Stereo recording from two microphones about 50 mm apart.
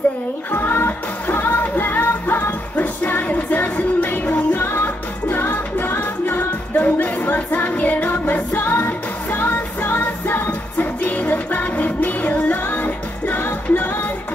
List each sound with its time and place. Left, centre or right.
0.5 s music: left